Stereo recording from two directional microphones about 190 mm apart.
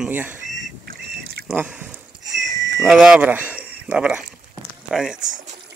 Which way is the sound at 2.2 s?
20° right (ahead or behind).